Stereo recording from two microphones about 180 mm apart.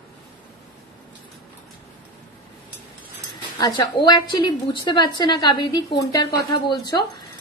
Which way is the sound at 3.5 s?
25° left (ahead or behind).